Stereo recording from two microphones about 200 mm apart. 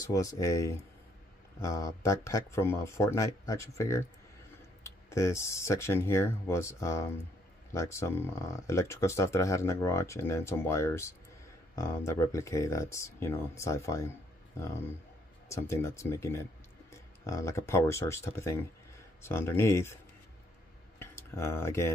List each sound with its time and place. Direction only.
0.0 s speech: 15° left (ahead or behind)
15.4 s speech: 15° left (ahead or behind)
21.0 s speech: 15° left (ahead or behind)